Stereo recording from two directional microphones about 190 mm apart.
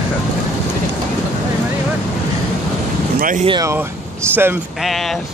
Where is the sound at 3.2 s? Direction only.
45° right (ahead or behind).